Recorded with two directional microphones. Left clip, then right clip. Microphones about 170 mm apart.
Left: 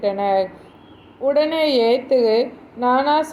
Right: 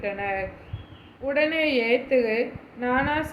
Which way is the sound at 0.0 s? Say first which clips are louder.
Left 9 dB; 30° left (ahead or behind).